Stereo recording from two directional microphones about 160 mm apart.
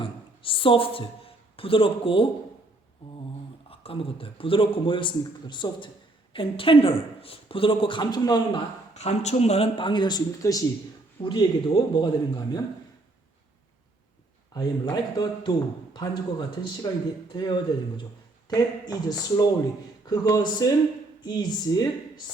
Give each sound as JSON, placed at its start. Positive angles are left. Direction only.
{"t": 0.0, "sound": "a sound", "side_deg": 35}
{"t": 3.0, "sound": "a man's voice", "side_deg": 35}
{"t": 9.0, "sound": "a man's voice", "side_deg": 45}
{"t": 14.5, "sound": "a man's voice", "side_deg": 25}